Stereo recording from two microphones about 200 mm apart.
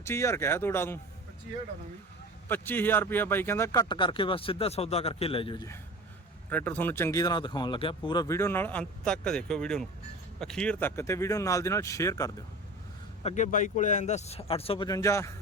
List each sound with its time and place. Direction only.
0.0 s speech: 15° left (ahead or behind)
2.5 s speech: 10° left (ahead or behind); by 5.6 s 25° left (ahead or behind)
6.5 s speech: 10° left (ahead or behind)
13.2 s speech: 40° left (ahead or behind); by 15.3 s 15° left (ahead or behind)